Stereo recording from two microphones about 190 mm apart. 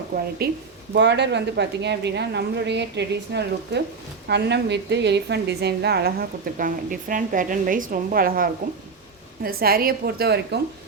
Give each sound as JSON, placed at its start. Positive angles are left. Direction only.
{"t": 0.4, "sound": "a woman's voice", "side_deg": -55}
{"t": 0.9, "sound": "a woman's voice", "side_deg": -65}